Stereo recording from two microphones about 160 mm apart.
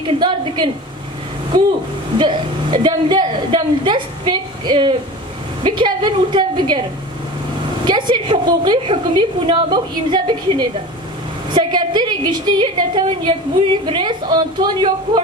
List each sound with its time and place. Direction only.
0.0 s a sound: 30° right (ahead or behind)
2.1 s a woman's voice: 30° right (ahead or behind)
7.8 s a woman's voice: 30° right (ahead or behind)